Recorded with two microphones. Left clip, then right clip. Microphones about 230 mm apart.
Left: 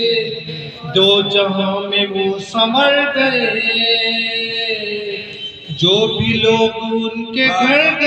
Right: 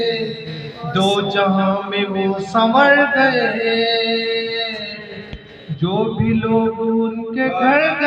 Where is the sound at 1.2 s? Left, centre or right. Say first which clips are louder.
Left 2 dB; right.